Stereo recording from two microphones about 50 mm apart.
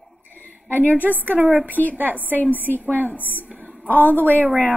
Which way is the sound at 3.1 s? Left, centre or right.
Left.